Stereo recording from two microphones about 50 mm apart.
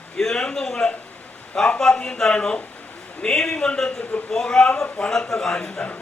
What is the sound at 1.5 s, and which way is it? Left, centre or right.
A man's voice, left.